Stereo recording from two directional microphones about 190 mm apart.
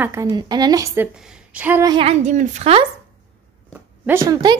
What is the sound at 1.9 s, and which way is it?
Speech, 30° right (ahead or behind).